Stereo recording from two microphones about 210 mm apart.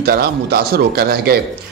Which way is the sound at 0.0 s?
45° right (ahead or behind).